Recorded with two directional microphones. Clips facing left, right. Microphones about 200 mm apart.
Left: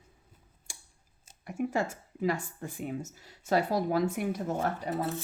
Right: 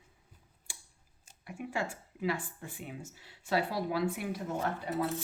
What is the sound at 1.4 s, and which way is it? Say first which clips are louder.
Speech: left 6 dB; 45° left (ahead or behind).